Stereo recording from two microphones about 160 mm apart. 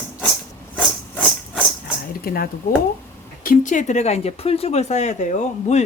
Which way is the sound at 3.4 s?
55° left (ahead or behind).